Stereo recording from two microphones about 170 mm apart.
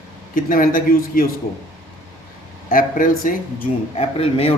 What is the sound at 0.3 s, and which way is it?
Speech, 55° left (ahead or behind).